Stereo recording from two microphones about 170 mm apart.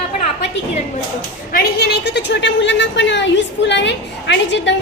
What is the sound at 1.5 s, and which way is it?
A woman's voice, 70° left (ahead or behind).